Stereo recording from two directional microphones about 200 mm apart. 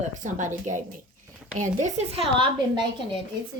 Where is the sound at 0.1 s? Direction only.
40° right (ahead or behind).